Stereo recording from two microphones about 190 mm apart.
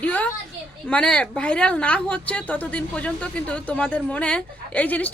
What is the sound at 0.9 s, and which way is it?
A woman's voice, 5° left (ahead or behind).